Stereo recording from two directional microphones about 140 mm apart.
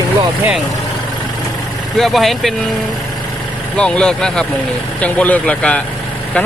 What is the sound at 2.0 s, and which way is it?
Speech, centre (ahead or behind).